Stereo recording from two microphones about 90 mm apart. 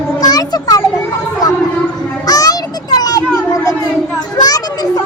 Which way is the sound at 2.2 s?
45° left (ahead or behind).